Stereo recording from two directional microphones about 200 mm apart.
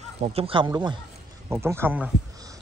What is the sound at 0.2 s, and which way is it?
Speech, 30° right (ahead or behind).